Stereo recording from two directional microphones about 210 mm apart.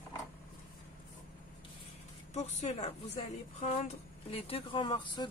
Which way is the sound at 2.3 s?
30° left (ahead or behind).